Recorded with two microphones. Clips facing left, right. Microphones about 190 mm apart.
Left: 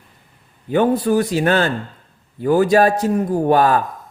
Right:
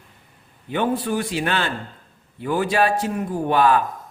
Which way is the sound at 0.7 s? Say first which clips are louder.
Left 7 dB; 40° left (ahead or behind).